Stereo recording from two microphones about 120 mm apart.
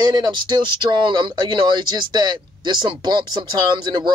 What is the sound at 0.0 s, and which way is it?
Speech, 35° right (ahead or behind).